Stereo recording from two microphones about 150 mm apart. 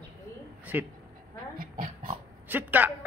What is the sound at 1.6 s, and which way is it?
Pig, 65° right (ahead or behind).